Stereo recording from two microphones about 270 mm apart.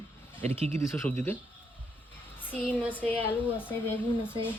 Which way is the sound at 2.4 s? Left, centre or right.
Centre.